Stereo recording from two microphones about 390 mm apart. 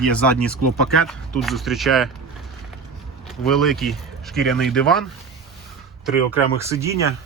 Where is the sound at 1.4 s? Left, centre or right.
Centre.